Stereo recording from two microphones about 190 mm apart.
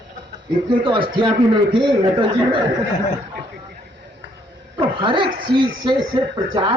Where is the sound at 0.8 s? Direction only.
25° right (ahead or behind).